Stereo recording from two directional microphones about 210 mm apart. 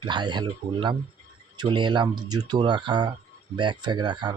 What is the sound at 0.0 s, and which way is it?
Speech, 20° right (ahead or behind).